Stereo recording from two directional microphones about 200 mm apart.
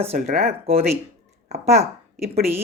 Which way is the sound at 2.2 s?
50° right (ahead or behind).